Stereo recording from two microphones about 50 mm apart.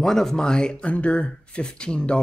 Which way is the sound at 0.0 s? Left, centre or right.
Centre.